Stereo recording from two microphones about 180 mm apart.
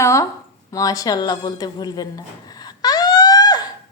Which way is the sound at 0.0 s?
15° left (ahead or behind).